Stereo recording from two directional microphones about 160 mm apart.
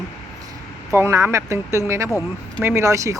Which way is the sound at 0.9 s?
15° right (ahead or behind).